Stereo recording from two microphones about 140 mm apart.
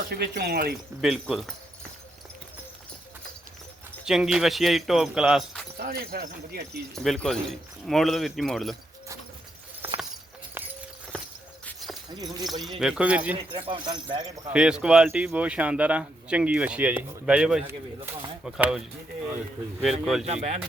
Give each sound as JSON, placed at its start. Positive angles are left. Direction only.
{"t": 0.1, "sound": "speech", "side_deg": -90}
{"t": 1.0, "sound": "speech", "side_deg": 0}
{"t": 4.0, "sound": "speech", "side_deg": -5}
{"t": 5.8, "sound": "speech", "side_deg": -90}
{"t": 6.9, "sound": "speech", "side_deg": 0}
{"t": 9.8, "sound": "a sound", "side_deg": -15}
{"t": 11.8, "sound": "horse", "side_deg": 0}
{"t": 12.5, "sound": "speech", "side_deg": 0}
{"t": 13.3, "sound": "speech", "side_deg": -40}
{"t": 14.5, "sound": "speech", "side_deg": -5}
{"t": 17.7, "sound": "speech", "side_deg": -20}
{"t": 18.4, "sound": "speech", "side_deg": -5}
{"t": 19.8, "sound": "speech", "side_deg": 0}
{"t": 20.2, "sound": "speech", "side_deg": -50}